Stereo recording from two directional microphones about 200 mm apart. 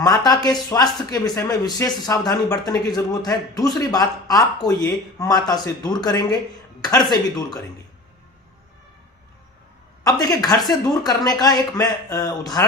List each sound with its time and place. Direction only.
0.7 s speech: 20° left (ahead or behind)
10.0 s speech: 20° left (ahead or behind)